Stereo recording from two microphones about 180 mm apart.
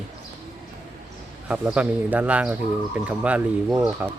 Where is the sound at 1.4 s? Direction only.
5° right (ahead or behind).